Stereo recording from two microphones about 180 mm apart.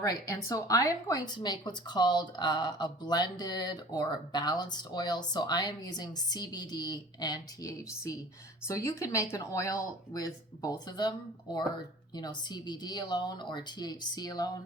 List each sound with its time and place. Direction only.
0.0 s speech: 20° left (ahead or behind)
12.1 s speech: 25° left (ahead or behind)